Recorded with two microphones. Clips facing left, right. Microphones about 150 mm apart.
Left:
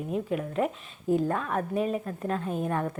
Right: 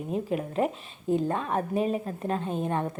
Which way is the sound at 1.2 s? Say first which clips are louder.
Even; 25° right (ahead or behind).